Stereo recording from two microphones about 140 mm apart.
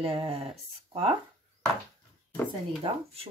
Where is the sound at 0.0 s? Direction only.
45° right (ahead or behind).